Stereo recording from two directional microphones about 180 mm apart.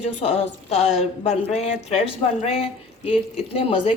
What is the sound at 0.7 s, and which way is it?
A woman's voice, 40° left (ahead or behind).